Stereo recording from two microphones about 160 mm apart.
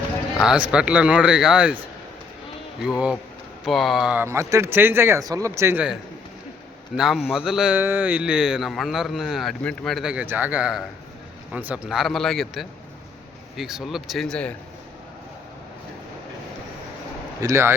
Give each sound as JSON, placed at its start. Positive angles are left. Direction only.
{"t": 0.3, "sound": "a man's voice", "side_deg": -5}
{"t": 3.6, "sound": "a man's voice", "side_deg": 0}
{"t": 17.4, "sound": "a man's voice", "side_deg": -15}